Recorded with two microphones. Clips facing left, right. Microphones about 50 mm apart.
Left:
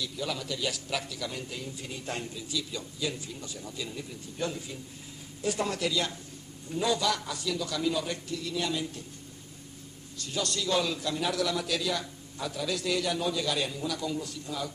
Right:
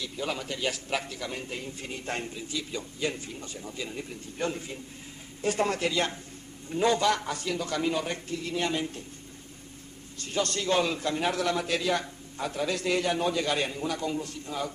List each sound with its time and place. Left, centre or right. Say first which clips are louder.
0.0 s a man's voice: right 1 dB; right
10.1 s a man's voice: right 3 dB; right